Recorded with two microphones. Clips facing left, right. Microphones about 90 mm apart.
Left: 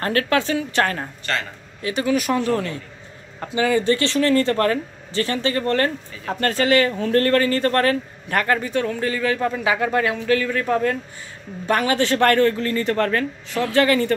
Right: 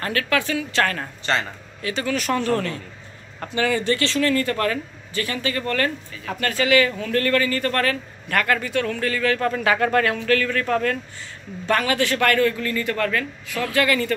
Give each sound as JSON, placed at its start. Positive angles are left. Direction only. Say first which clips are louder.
{"t": 0.0, "sound": "a man's voice", "louder": "left 3 dB", "side_deg": 35}
{"t": 1.2, "sound": "a man's voice", "louder": "right 3 dB", "side_deg": -25}
{"t": 1.8, "sound": "a man's voice", "louder": "left 4 dB", "side_deg": 25}